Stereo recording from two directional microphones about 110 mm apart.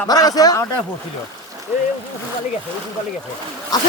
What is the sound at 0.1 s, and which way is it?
Speech, 35° left (ahead or behind).